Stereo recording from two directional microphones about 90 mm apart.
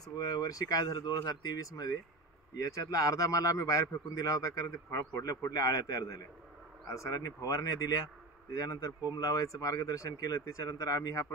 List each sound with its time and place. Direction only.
0.0 s a man's voice: 45° left (ahead or behind)
9.1 s a man's voice: 40° left (ahead or behind)